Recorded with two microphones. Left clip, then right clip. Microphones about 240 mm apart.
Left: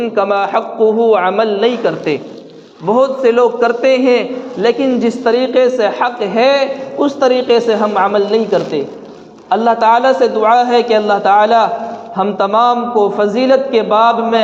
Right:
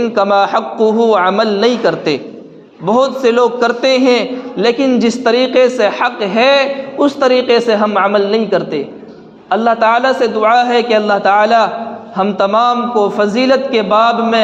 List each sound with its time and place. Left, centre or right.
0.0 s a man's voice: right